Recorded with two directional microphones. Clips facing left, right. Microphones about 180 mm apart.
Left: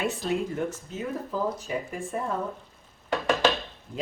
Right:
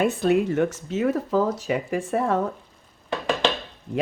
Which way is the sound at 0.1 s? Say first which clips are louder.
Right 8 dB; 60° right (ahead or behind).